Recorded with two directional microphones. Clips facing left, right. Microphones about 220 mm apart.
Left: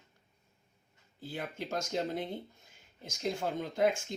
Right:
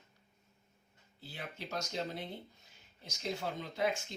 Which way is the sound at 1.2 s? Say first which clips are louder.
Left 7 dB; 50° left (ahead or behind).